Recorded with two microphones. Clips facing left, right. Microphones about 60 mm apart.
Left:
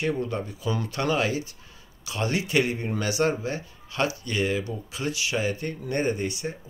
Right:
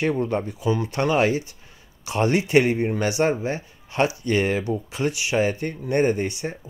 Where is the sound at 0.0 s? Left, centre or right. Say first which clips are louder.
Right 5 dB; right.